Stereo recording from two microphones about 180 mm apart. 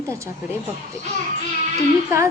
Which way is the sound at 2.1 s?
15° right (ahead or behind).